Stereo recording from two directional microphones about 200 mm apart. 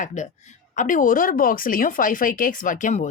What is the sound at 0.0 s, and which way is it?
Speech, 35° left (ahead or behind).